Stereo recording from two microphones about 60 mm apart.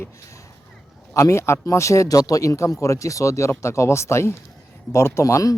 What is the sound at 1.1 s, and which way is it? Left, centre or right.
Speech, left.